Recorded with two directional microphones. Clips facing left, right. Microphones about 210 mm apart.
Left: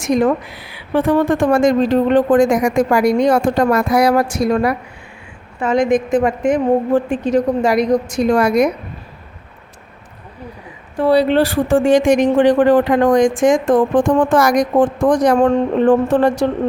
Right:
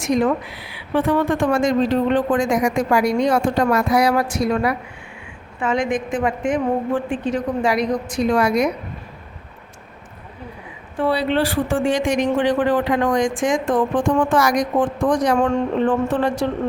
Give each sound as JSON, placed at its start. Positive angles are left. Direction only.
{"t": 0.0, "sound": "a woman's voice", "side_deg": 45}
{"t": 10.9, "sound": "speech", "side_deg": 40}